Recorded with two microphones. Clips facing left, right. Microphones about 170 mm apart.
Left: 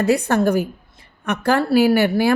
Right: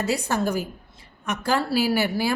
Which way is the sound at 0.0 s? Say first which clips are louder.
Left 7 dB; 60° left (ahead or behind).